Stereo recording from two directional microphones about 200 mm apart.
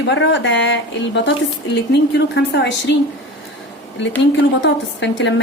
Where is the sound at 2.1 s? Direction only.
60° left (ahead or behind).